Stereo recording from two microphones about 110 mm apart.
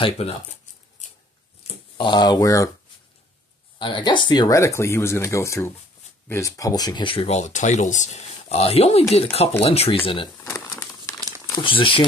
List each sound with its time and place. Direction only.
0.0 s speech: 65° left (ahead or behind)
2.0 s speech: 45° left (ahead or behind)
3.7 s speech: 45° left (ahead or behind)
4.5 s speech: 30° left (ahead or behind); by 7.2 s 50° left (ahead or behind)
7.2 s speech: 90° left; by 10.3 s 55° left (ahead or behind)
10.4 s crumpling: 25° left (ahead or behind)
11.5 s speech: 50° left (ahead or behind)